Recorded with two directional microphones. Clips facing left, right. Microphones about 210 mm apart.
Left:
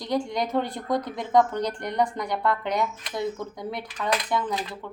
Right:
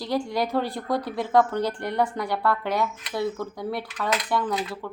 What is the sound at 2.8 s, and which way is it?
Speech, 20° left (ahead or behind).